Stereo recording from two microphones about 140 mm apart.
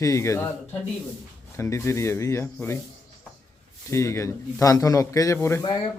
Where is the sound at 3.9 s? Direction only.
20° left (ahead or behind).